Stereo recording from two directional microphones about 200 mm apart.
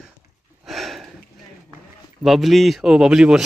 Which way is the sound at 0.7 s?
Centre (ahead or behind).